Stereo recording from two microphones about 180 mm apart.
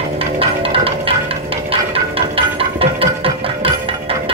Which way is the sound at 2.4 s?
30° right (ahead or behind).